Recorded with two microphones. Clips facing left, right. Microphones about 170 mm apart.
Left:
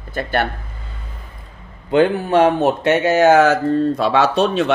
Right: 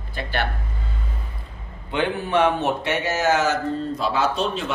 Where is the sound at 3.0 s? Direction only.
60° left (ahead or behind).